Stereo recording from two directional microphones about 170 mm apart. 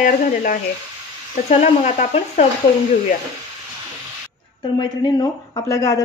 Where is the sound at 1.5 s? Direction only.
40° left (ahead or behind).